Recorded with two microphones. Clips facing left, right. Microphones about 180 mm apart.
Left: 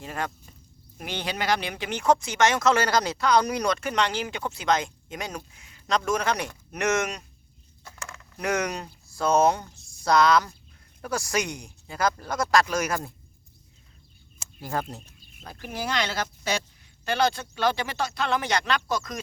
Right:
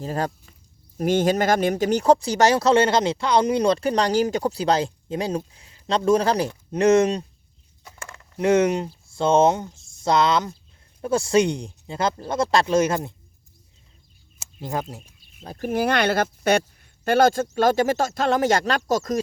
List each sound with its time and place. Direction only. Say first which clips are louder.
0.0 s speech: right 6 dB; 35° right (ahead or behind)
0.9 s speech: right 12 dB; 45° right (ahead or behind); by 13.1 s 25° right (ahead or behind)
14.6 s speech: right 2 dB; 15° right (ahead or behind)
15.5 s speech: right 8 dB; 50° right (ahead or behind)